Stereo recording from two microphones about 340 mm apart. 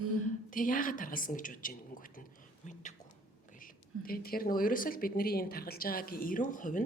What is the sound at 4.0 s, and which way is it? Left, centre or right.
Speech, left.